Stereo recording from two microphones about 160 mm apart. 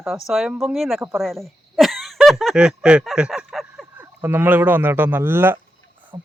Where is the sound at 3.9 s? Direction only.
10° right (ahead or behind).